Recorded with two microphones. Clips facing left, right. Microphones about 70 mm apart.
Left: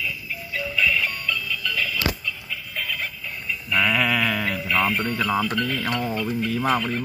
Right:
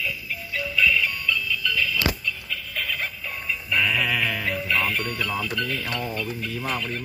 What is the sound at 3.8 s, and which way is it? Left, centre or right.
Speech, left.